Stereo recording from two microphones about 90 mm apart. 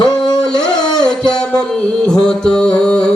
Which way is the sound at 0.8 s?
50° left (ahead or behind).